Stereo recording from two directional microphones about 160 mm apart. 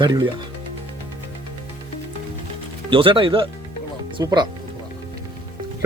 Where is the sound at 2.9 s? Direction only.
35° right (ahead or behind).